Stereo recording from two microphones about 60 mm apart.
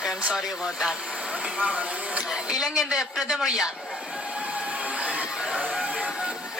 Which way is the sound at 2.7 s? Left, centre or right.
Centre.